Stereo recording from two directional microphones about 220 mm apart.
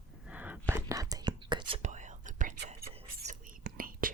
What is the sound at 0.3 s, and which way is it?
Whispering, 5° right (ahead or behind).